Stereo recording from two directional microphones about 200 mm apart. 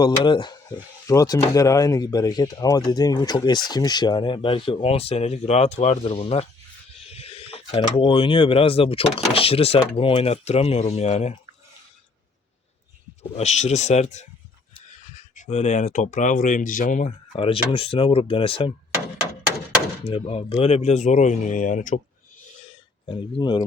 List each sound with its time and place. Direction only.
0.0 s speech: 20° left (ahead or behind)
13.3 s speech: 35° left (ahead or behind)
20.1 s speech: 30° left (ahead or behind)
23.0 s speech: 25° left (ahead or behind)